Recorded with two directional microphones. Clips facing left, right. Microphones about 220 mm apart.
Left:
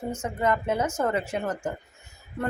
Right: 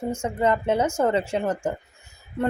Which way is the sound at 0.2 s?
30° right (ahead or behind).